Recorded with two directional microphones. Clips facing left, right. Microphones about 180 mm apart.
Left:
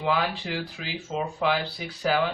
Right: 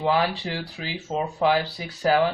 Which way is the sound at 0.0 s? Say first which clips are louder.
Right 3 dB; 40° right (ahead or behind).